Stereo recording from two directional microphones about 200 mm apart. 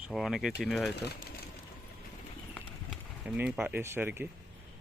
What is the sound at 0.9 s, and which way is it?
Speech, 55° left (ahead or behind).